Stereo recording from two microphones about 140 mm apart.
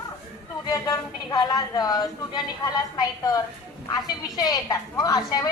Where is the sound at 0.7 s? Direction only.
25° left (ahead or behind).